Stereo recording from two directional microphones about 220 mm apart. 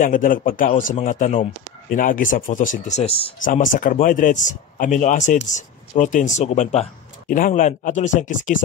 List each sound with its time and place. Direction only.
0.0 s speech: 35° left (ahead or behind)